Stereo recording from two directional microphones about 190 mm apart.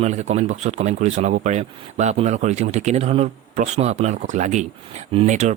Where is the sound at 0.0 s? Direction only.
35° right (ahead or behind).